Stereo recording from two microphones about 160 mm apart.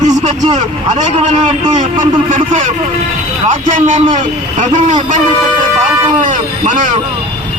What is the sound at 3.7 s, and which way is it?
A man's voice, 50° right (ahead or behind).